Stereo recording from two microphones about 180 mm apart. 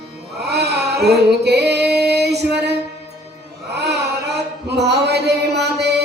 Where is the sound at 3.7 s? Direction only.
70° right (ahead or behind).